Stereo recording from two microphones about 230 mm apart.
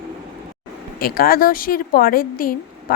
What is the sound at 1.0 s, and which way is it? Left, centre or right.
A woman's voice, left.